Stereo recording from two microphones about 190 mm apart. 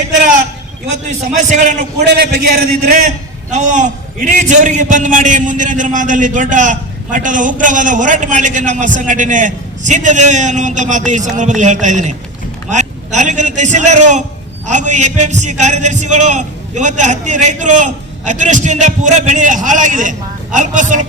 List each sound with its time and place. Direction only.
1.4 s a man's voice: 40° right (ahead or behind)
2.0 s a man's voice: 60° right (ahead or behind)
3.1 s a man's voice: 40° right (ahead or behind)